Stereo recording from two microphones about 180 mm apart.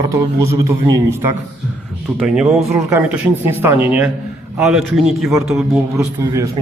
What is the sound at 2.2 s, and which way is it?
A man's voice, 5° right (ahead or behind).